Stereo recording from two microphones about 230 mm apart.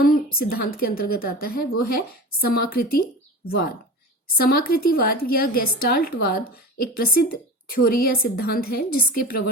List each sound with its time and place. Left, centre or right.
0.0 s a woman's voice: left
4.4 s a woman's voice: left